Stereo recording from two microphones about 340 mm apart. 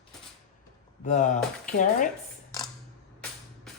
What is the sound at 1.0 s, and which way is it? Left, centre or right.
Speech, left.